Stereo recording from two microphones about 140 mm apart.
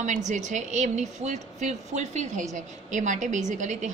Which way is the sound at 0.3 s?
60° right (ahead or behind).